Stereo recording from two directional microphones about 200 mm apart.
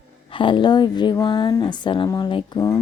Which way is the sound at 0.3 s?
25° left (ahead or behind).